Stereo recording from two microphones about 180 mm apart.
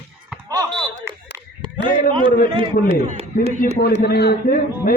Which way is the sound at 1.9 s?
30° right (ahead or behind).